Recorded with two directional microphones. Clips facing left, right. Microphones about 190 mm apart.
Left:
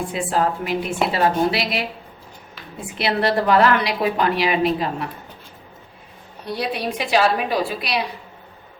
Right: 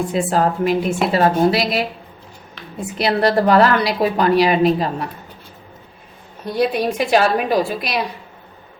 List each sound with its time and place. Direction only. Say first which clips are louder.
0.1 s a woman's voice: right 4 dB; 40° right (ahead or behind)
3.0 s a woman's voice: right 4 dB; 40° right (ahead or behind)
6.4 s a woman's voice: right 6 dB; 45° right (ahead or behind)